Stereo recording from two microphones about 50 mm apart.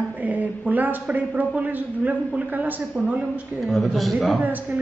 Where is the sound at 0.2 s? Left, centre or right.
Right.